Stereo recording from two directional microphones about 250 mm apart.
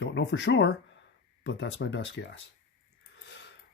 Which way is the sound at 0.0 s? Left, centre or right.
Left.